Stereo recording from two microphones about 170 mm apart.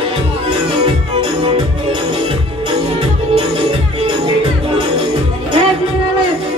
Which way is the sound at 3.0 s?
30° right (ahead or behind).